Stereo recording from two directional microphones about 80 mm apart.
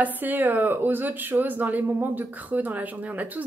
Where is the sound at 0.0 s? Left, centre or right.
Right.